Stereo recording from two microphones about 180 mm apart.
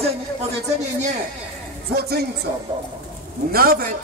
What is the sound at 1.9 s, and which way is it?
Speech, 60° right (ahead or behind).